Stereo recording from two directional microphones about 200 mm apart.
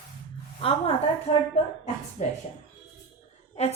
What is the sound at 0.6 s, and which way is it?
Speech, 30° left (ahead or behind).